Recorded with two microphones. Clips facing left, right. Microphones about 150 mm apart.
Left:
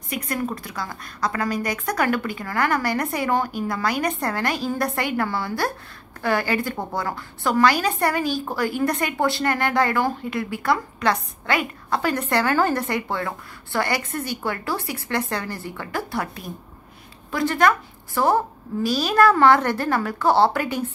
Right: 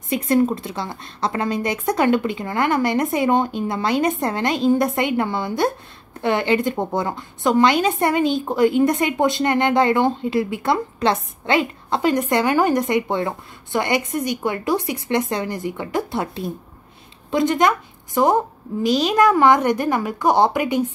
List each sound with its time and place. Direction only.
0.1 s a woman's voice: 25° right (ahead or behind)